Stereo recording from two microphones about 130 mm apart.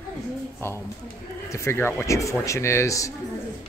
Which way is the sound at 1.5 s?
20° left (ahead or behind).